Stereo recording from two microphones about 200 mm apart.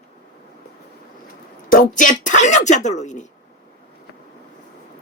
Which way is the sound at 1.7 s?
45° left (ahead or behind).